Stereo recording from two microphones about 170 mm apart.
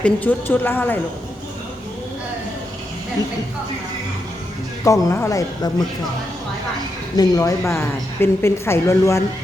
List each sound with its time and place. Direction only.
0.0 s a woman's voice: 10° left (ahead or behind)
4.8 s speech: 20° left (ahead or behind)
7.2 s a woman's voice: 20° left (ahead or behind)